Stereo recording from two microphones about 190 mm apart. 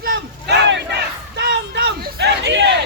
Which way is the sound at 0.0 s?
60° right (ahead or behind).